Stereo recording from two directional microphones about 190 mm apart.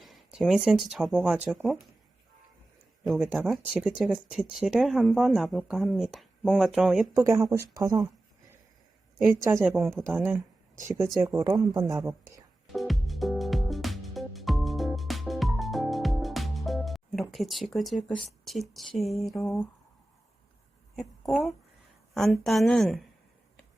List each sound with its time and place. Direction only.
0.0 s speech: centre (ahead or behind)
3.0 s speech: centre (ahead or behind)
7.1 s speech: 15° right (ahead or behind)
9.4 s speech: 15° right (ahead or behind)
9.7 s speech: centre (ahead or behind); by 12.1 s 20° right (ahead or behind)
12.7 s music: centre (ahead or behind)
20.9 s speech: centre (ahead or behind)